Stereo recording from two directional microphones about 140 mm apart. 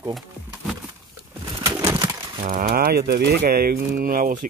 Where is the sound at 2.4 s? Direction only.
80° right.